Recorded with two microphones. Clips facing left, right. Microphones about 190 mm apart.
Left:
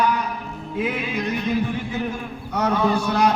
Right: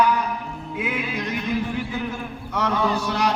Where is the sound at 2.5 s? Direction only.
45° left (ahead or behind).